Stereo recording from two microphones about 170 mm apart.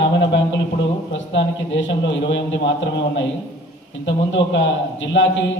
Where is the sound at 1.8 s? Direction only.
90° left.